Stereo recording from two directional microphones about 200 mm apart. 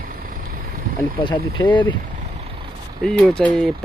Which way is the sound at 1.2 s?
20° left (ahead or behind).